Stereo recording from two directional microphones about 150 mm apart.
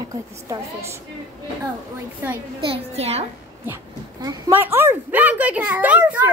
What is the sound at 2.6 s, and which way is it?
Speech, 40° right (ahead or behind).